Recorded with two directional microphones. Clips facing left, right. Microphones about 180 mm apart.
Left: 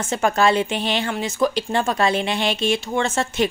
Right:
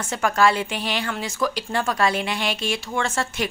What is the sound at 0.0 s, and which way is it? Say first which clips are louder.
A woman's voice: left 2 dB; 25° left (ahead or behind).